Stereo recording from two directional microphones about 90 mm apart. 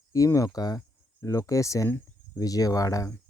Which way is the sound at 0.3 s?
45° left (ahead or behind).